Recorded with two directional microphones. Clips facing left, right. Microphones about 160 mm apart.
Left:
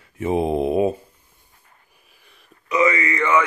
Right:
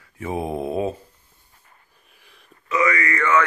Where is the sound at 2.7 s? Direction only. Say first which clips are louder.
Left 2 dB; 20° left (ahead or behind).